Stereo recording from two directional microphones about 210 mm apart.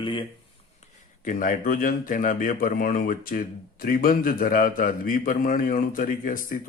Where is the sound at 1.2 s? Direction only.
40° left (ahead or behind).